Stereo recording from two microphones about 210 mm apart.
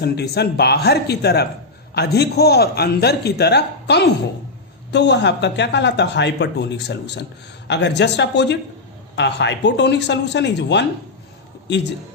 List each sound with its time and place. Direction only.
0.0 s a man's voice: 50° left (ahead or behind)